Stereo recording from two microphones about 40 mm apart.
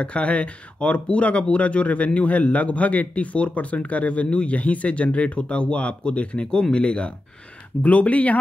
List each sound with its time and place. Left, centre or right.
0.0 s a man's voice: left